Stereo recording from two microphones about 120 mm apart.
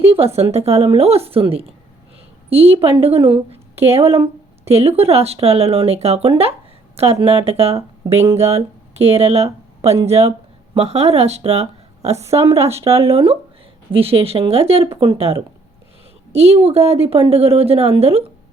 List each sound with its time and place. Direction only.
0.2 s a woman's voice: 55° right (ahead or behind)
12.1 s a woman's voice: 25° right (ahead or behind)
12.5 s a woman's voice: 60° right (ahead or behind)
12.7 s a woman's voice: 25° right (ahead or behind)
13.1 s a woman's voice: 55° right (ahead or behind)